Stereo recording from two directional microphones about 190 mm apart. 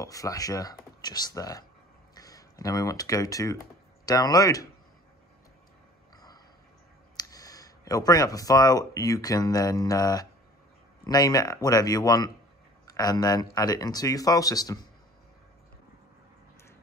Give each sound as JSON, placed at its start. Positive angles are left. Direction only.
{"t": 0.0, "sound": "speech", "side_deg": 20}
{"t": 7.2, "sound": "speech", "side_deg": 20}